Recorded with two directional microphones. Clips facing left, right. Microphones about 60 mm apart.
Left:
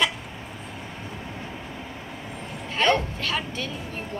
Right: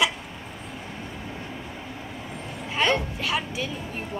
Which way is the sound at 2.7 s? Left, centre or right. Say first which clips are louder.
Left 2 dB; centre.